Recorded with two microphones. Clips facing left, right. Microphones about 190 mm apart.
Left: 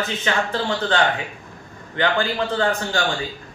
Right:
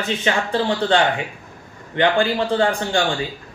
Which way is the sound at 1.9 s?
20° right (ahead or behind).